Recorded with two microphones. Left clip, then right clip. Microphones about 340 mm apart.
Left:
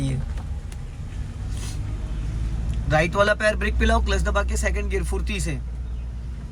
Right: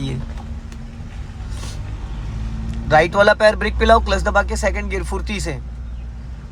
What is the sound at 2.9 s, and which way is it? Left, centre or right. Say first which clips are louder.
A man's voice: right 7 dB; centre.